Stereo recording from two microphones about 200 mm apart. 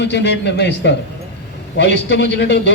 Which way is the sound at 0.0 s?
60° left (ahead or behind).